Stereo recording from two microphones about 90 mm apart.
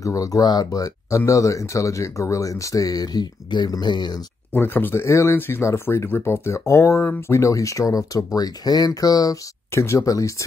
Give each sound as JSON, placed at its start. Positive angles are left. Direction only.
{"t": 0.0, "sound": "speech", "side_deg": 40}
{"t": 4.6, "sound": "speech", "side_deg": 25}